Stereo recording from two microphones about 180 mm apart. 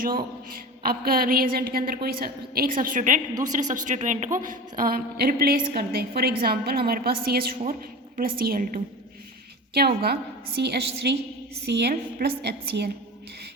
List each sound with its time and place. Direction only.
0.9 s a woman's voice: 55° right (ahead or behind)
7.6 s a woman's voice: 50° right (ahead or behind)
9.7 s a woman's voice: 60° right (ahead or behind)